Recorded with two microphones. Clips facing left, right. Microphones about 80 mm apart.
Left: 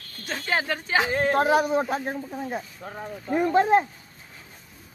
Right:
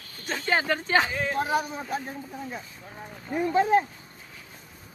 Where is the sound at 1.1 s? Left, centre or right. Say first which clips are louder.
Left 6 dB; left.